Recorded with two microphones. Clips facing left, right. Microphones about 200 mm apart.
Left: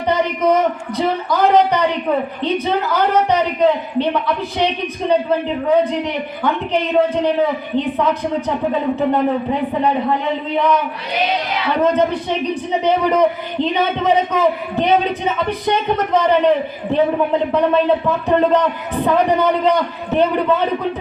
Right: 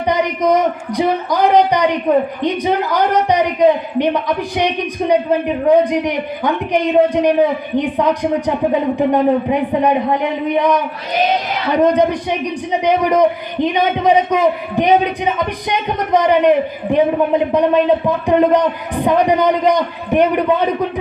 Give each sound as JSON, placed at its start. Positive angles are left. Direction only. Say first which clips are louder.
{"t": 0.1, "sound": "a man's voice", "louder": "right 1 dB", "side_deg": -15}
{"t": 11.1, "sound": "speech", "louder": "right 4 dB", "side_deg": -45}
{"t": 11.8, "sound": "a man's voice", "louder": "right 3 dB", "side_deg": -15}